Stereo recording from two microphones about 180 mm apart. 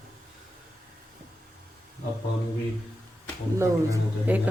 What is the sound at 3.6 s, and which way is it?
Speech, 10° right (ahead or behind).